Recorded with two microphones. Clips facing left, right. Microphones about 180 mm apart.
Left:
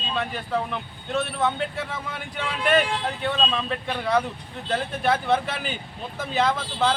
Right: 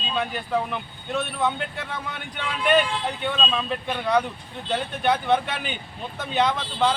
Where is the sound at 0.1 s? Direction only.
Centre (ahead or behind).